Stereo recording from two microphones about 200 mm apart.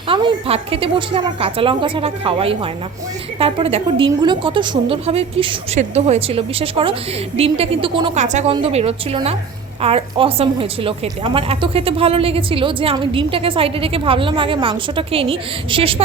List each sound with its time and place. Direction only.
0.1 s a woman's voice: 25° right (ahead or behind)
8.2 s a woman's voice: 35° right (ahead or behind)